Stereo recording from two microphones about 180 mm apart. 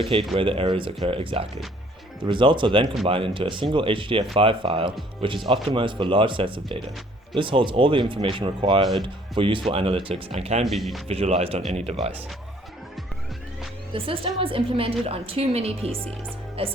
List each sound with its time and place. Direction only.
0.0 s a woman's voice: 30° right (ahead or behind)
10.7 s speech: centre (ahead or behind)
11.1 s a woman's voice: 35° right (ahead or behind)
13.9 s a woman's voice: 30° right (ahead or behind)